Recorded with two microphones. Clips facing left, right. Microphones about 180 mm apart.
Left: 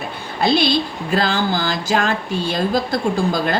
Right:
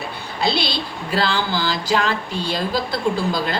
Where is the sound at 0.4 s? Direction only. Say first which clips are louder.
Left 6 dB; 50° left (ahead or behind).